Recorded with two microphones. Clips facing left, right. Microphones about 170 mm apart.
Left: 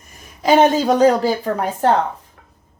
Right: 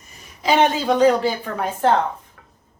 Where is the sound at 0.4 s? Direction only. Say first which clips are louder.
Left 4 dB; 45° left (ahead or behind).